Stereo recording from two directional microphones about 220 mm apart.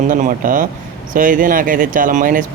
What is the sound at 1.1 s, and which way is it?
Speech, 40° right (ahead or behind).